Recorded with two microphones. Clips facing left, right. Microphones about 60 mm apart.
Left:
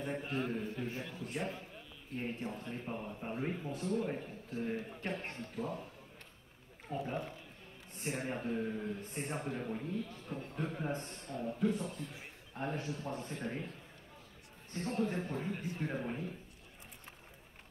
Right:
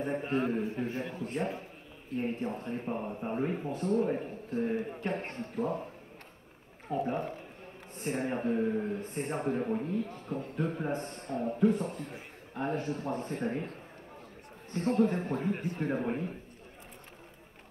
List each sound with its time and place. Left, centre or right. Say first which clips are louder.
0.0 s a man's voice: right 7 dB; right
3.4 s a man's voice: right 5 dB; right
6.9 s a man's voice: right 7 dB; right